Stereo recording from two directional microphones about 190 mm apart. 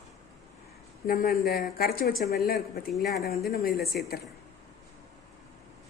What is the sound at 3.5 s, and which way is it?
Speech, 50° left (ahead or behind).